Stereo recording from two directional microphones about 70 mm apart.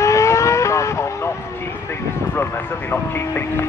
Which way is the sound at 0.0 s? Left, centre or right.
Left.